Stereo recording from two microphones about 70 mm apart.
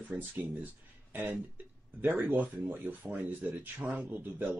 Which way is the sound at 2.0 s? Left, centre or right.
Right.